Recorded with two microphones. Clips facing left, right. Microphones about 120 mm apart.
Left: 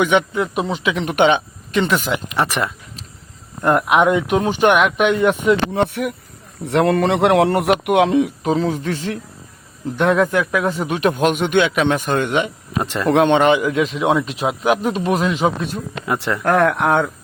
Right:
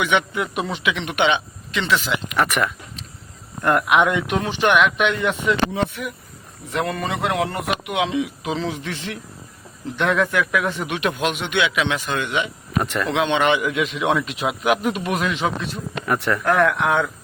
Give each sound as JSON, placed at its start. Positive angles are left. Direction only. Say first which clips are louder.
{"t": 0.0, "sound": "speech", "louder": "left 5 dB", "side_deg": 40}
{"t": 2.3, "sound": "a man's voice", "louder": "right 2 dB", "side_deg": 30}
{"t": 12.8, "sound": "speech", "louder": "left 2 dB", "side_deg": 25}
{"t": 13.1, "sound": "speech", "louder": "left 7 dB", "side_deg": 50}
{"t": 16.0, "sound": "speech", "louder": "even", "side_deg": 25}
{"t": 16.4, "sound": "speech", "louder": "left 4 dB", "side_deg": 40}